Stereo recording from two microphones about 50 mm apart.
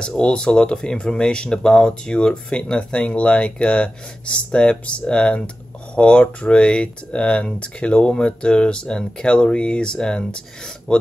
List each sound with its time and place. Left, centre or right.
0.2 s speech: centre